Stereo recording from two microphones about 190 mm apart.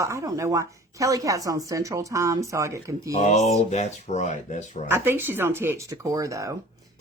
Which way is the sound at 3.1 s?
40° left (ahead or behind).